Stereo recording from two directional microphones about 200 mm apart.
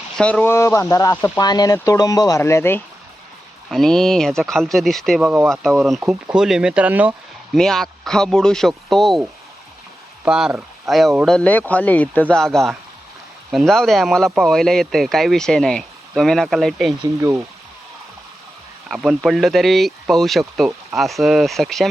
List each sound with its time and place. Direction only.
0.2 s speech: 5° left (ahead or behind)
3.7 s speech: centre (ahead or behind)
10.2 s speech: 5° right (ahead or behind)
17.0 s speech: 15° right (ahead or behind)
18.9 s speech: centre (ahead or behind)